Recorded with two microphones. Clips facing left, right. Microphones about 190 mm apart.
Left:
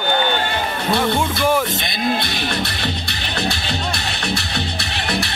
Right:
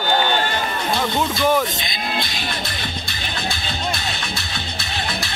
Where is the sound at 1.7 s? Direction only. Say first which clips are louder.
Left 5 dB; 60° left (ahead or behind).